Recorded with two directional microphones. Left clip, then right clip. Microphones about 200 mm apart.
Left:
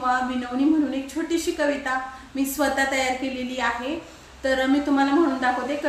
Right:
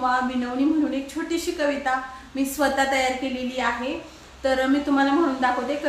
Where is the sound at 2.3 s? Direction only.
5° left (ahead or behind).